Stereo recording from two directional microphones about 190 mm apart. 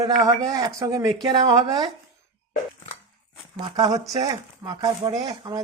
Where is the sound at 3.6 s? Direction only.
20° right (ahead or behind).